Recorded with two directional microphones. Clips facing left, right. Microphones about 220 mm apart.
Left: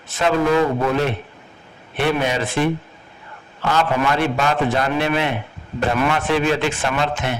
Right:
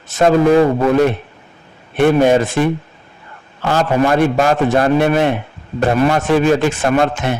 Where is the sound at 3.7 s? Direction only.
45° right (ahead or behind).